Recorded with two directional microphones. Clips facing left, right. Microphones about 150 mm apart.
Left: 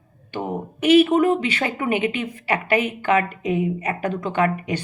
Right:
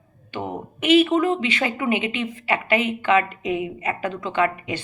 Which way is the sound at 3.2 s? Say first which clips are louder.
Even; 25° right (ahead or behind).